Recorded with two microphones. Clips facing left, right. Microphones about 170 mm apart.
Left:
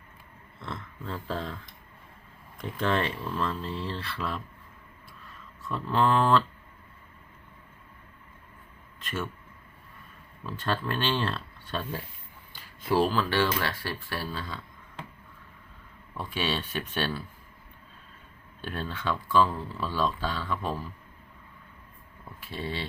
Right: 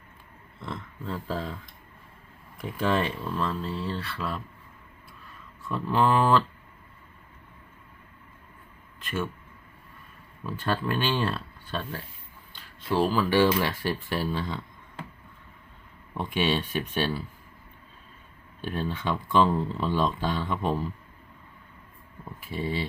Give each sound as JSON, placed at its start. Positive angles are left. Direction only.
{"t": 0.6, "sound": "speech", "side_deg": 0}
{"t": 2.6, "sound": "speech", "side_deg": -5}
{"t": 5.6, "sound": "speech", "side_deg": -5}
{"t": 9.0, "sound": "speech", "side_deg": 0}
{"t": 10.4, "sound": "speech", "side_deg": -5}
{"t": 13.1, "sound": "speech", "side_deg": -10}
{"t": 16.1, "sound": "speech", "side_deg": -20}
{"t": 18.8, "sound": "speech", "side_deg": -15}
{"t": 22.4, "sound": "speech", "side_deg": -15}